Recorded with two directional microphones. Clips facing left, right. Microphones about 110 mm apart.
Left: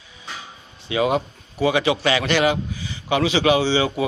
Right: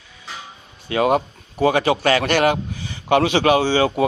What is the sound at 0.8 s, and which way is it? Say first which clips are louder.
A man's voice: right 3 dB; 50° right (ahead or behind).